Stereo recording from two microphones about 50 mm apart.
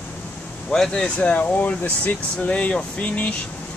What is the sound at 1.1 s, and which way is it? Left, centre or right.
Speech, left.